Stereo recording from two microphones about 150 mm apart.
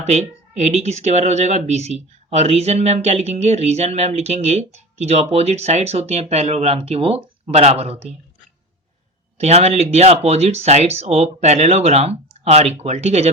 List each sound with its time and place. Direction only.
0.0 s speech: 45° right (ahead or behind)
9.4 s speech: 45° right (ahead or behind)